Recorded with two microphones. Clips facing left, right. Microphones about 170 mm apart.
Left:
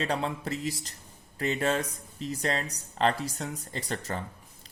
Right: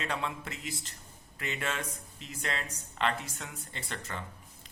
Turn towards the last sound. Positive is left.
turn(degrees=35)  # may be behind; listen again after turning